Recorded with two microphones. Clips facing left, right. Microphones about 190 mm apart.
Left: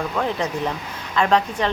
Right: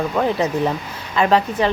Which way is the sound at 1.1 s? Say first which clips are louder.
Right 2 dB; 5° right (ahead or behind).